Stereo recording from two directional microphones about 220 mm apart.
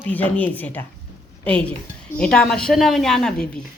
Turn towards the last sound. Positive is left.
turn(degrees=0)  # may be behind; listen again after turning